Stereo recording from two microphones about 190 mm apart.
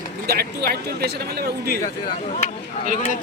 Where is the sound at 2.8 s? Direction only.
40° right (ahead or behind).